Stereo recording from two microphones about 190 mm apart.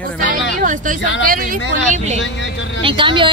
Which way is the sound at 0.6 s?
45° right (ahead or behind).